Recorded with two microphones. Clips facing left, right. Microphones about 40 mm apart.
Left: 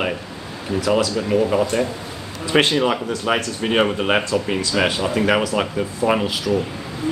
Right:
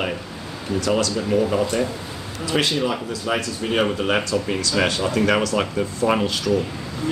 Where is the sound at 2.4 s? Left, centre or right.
Left.